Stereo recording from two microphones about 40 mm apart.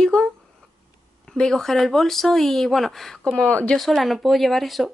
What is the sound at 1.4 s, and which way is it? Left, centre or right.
Speech, centre.